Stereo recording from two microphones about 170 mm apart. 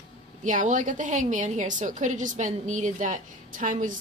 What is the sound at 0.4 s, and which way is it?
A woman's voice, 45° right (ahead or behind).